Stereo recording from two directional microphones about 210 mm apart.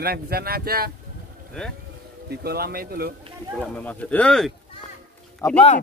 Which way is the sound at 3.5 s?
5° left (ahead or behind).